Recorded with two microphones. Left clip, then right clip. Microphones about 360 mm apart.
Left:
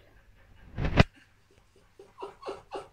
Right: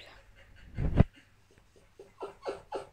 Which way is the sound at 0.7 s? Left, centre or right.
Left.